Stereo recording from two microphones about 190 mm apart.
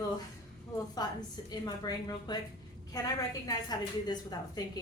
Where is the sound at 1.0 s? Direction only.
20° left (ahead or behind).